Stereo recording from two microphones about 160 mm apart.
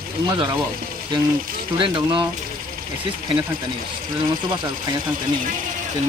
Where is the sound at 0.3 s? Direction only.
30° right (ahead or behind).